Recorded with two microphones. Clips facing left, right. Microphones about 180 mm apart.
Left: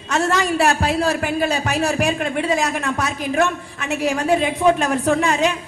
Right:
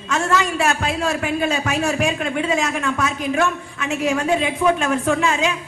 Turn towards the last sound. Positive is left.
turn(degrees=40)  # may be behind; listen again after turning